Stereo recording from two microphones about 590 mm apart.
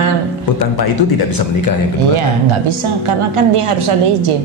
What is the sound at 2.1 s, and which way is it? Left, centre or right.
A woman's voice, right.